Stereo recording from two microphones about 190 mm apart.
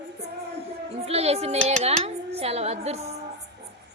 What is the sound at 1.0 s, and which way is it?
Music, 35° right (ahead or behind).